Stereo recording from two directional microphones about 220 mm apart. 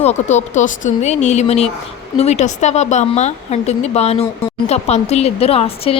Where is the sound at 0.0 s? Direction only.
30° left (ahead or behind).